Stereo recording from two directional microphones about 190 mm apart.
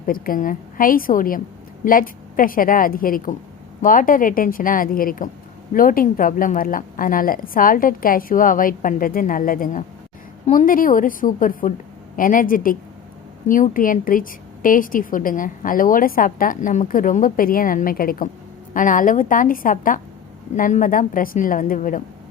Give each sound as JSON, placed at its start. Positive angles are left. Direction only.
{"t": 0.0, "sound": "a woman's voice", "side_deg": 50}